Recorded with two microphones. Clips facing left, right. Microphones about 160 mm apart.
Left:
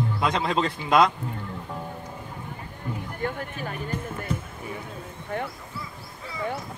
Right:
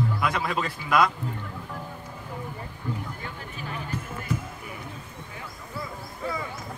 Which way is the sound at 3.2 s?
50° left (ahead or behind).